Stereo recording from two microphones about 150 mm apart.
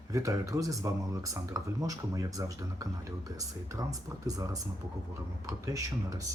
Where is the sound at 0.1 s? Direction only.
20° right (ahead or behind).